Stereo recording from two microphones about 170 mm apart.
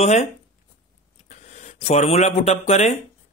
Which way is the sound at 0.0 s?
40° left (ahead or behind).